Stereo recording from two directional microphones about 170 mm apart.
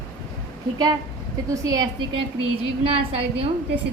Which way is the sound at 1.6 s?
20° right (ahead or behind).